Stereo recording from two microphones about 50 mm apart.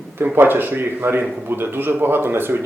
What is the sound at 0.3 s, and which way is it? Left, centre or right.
A man's voice, right.